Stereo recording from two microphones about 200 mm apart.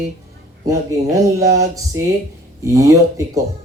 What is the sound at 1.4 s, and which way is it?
Speech, 15° right (ahead or behind).